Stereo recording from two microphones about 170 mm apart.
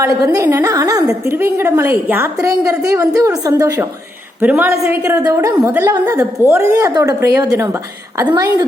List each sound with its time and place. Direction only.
0.0 s a woman's voice: 15° right (ahead or behind)